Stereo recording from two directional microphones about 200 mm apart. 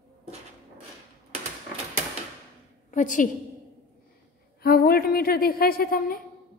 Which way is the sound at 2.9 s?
40° left (ahead or behind).